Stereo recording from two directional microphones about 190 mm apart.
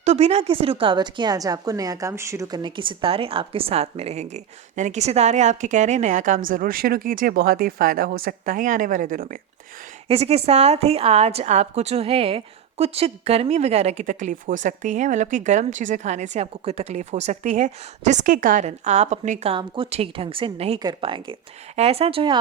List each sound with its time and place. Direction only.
0.0 s a woman's voice: 35° right (ahead or behind)
10.1 s a woman's voice: 30° right (ahead or behind)